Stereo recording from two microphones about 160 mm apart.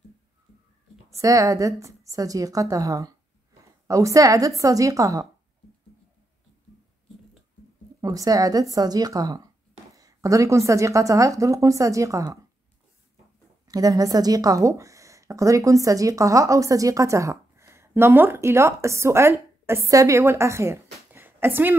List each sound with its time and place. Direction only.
1.1 s a woman's voice: 20° right (ahead or behind)
8.0 s a woman's voice: 20° right (ahead or behind)
13.7 s speech: 25° right (ahead or behind)